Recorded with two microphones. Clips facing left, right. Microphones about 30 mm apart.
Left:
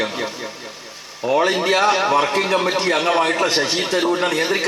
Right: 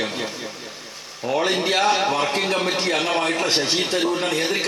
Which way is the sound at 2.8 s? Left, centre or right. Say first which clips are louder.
Left 4 dB; centre.